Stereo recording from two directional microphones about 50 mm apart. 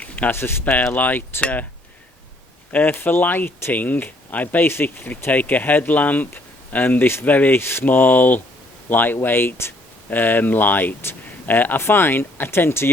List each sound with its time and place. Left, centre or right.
0.3 s speech: left
0.9 s speech: left
2.9 s speech: left
4.7 s speech: left
7.3 s speech: left
7.5 s speech: left
10.1 s speech: left